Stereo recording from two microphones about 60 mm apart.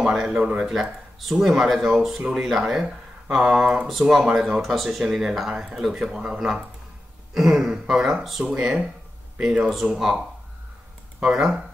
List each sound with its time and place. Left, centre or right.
0.0 s speech: centre
0.3 s speech: centre
0.6 s speech: centre
11.2 s speech: centre